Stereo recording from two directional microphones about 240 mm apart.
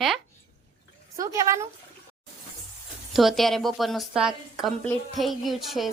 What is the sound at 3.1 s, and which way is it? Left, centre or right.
A woman's voice, centre.